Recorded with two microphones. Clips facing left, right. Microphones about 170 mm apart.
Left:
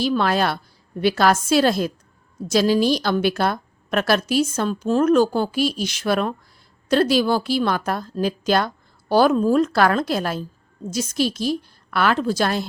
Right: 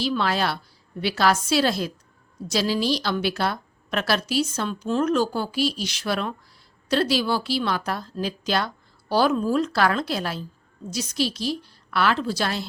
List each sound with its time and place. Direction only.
0.0 s a woman's voice: 50° left (ahead or behind)